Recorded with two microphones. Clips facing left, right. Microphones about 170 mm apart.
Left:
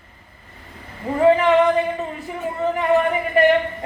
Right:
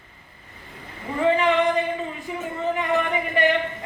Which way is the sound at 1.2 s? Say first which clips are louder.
Left 5 dB; 40° left (ahead or behind).